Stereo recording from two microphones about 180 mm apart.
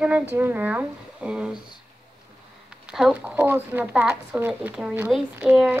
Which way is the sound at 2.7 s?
5° right (ahead or behind).